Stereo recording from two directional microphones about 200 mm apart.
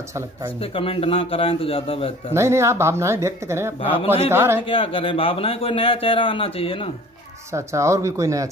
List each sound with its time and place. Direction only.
0.6 s a man's voice: 30° left (ahead or behind)
2.3 s a woman's voice: 15° right (ahead or behind)
4.6 s a man's voice: 25° left (ahead or behind)
7.5 s a woman's voice: 15° right (ahead or behind)